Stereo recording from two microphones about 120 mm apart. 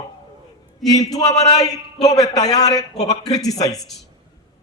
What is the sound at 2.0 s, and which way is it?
A man's voice, 30° left (ahead or behind).